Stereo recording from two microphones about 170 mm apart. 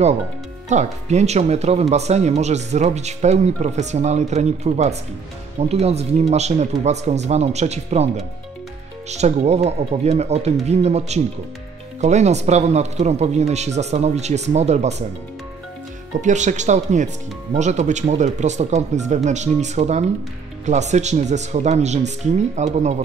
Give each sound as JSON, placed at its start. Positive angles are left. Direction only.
{"t": 0.7, "sound": "speech", "side_deg": -45}
{"t": 9.1, "sound": "speech", "side_deg": -40}
{"t": 16.2, "sound": "speech", "side_deg": -45}